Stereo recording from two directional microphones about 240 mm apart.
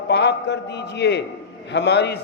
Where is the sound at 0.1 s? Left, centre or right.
Left.